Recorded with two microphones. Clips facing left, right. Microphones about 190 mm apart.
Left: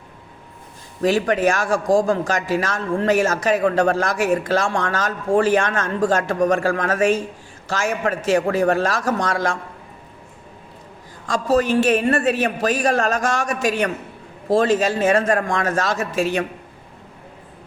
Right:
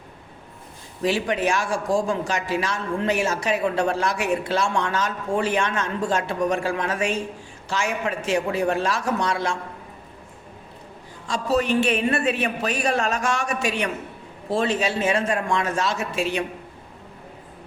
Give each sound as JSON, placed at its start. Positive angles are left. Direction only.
{"t": 1.0, "sound": "a man's voice", "side_deg": 45}
{"t": 1.6, "sound": "a man's voice", "side_deg": 90}
{"t": 2.0, "sound": "a man's voice", "side_deg": 45}
{"t": 11.3, "sound": "a man's voice", "side_deg": 45}